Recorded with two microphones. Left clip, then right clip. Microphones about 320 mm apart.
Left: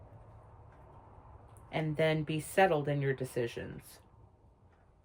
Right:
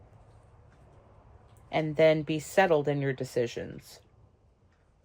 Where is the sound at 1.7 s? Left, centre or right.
Centre.